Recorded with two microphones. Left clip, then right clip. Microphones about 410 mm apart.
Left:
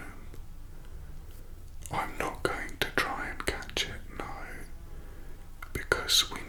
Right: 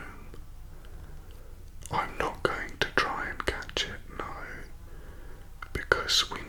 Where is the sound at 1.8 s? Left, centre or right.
Right.